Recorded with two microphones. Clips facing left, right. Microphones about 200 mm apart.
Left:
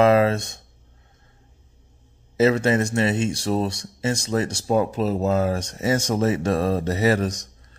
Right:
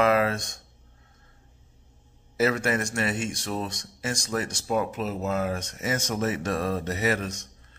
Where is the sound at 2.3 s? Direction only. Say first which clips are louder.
Left 6 dB; 25° left (ahead or behind).